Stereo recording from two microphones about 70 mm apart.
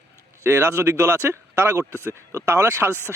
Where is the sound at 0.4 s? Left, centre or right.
Right.